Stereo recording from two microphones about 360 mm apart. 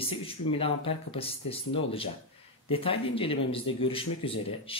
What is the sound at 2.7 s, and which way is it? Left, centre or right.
Speech, centre.